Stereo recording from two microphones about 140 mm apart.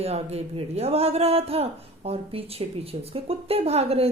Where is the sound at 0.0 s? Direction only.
50° right (ahead or behind).